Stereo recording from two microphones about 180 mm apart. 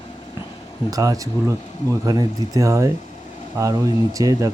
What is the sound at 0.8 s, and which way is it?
Speech, 20° right (ahead or behind).